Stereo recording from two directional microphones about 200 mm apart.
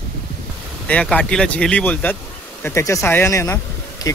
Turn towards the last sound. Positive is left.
turn(degrees=20)  # may be behind; listen again after turning